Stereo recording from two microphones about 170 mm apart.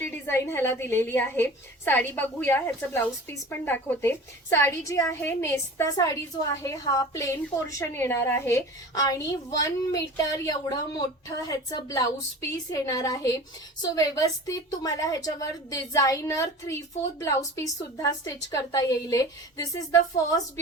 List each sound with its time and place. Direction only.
0.3 s a woman's voice: 15° left (ahead or behind)